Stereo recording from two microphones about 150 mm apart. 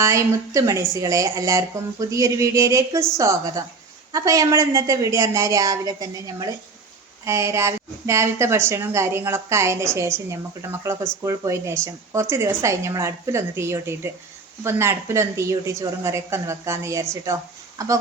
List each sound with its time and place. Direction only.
0.0 s speech: 20° right (ahead or behind)